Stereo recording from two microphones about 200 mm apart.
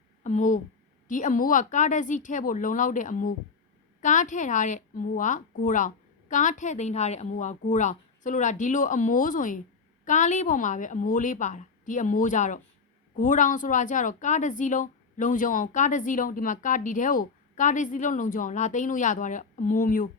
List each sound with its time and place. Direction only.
0.2 s a woman's voice: 35° left (ahead or behind)